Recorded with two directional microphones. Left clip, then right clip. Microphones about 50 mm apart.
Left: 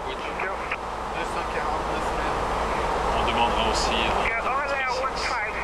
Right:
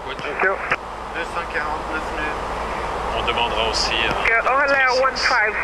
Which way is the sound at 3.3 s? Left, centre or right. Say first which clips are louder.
Right 4 dB; right.